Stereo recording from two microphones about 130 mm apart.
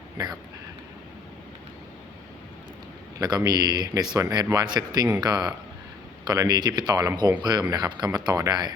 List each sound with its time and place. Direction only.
3.2 s speech: 30° right (ahead or behind)